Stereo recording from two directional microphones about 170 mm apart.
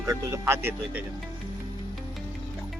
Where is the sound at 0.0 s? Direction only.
20° right (ahead or behind).